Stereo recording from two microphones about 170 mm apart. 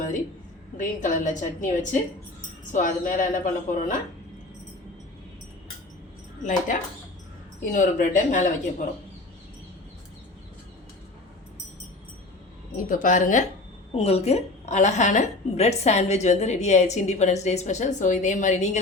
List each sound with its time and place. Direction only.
0.8 s a woman's voice: 50° left (ahead or behind)
6.4 s a woman's voice: 50° left (ahead or behind)
12.7 s a woman's voice: 50° left (ahead or behind)